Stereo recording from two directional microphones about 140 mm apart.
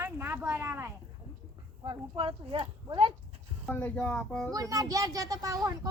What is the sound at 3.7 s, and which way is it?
Speech, 10° left (ahead or behind).